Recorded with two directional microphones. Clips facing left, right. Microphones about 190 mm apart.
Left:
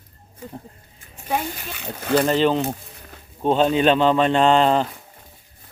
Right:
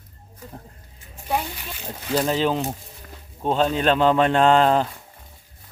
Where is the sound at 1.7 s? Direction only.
65° left (ahead or behind).